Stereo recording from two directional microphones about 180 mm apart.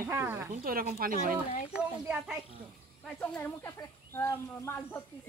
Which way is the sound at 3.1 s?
10° left (ahead or behind).